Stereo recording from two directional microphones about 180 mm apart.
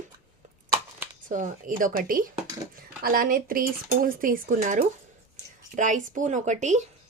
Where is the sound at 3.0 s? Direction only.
55° right (ahead or behind).